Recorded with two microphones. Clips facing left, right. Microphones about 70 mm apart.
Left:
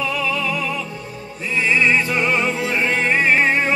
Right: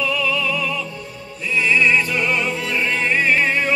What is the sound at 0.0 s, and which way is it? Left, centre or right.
Music, left.